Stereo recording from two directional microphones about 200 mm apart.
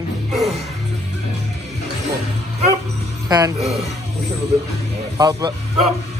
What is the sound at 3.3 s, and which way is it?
Speech, 20° right (ahead or behind).